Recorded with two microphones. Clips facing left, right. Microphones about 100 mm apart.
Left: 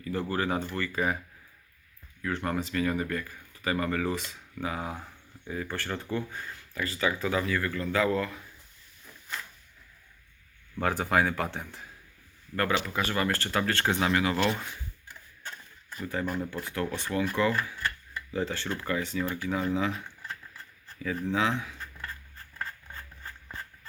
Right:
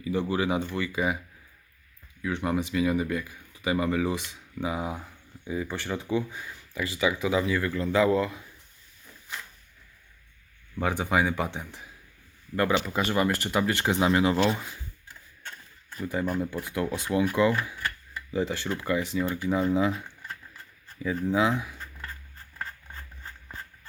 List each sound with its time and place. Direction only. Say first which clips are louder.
0.0 s speech: right 3 dB; 15° right (ahead or behind)
2.2 s speech: right 3 dB; 15° right (ahead or behind)
10.8 s speech: even; 5° right (ahead or behind)
14.1 s speech: right 4 dB; 25° right (ahead or behind)
14.5 s speech: right 2 dB; 5° right (ahead or behind)
15.4 s a sound: left 1 dB; 5° left (ahead or behind)
16.2 s speech: right 3 dB; 5° right (ahead or behind)
21.0 s speech: right 3 dB; 15° right (ahead or behind)